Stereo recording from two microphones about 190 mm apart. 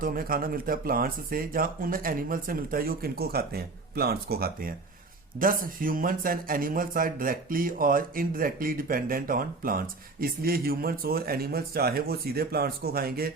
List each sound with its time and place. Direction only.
0.0 s speech: 50° right (ahead or behind)